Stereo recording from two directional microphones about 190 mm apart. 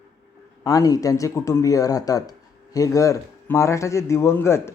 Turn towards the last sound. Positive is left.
turn(degrees=15)  # may be behind; listen again after turning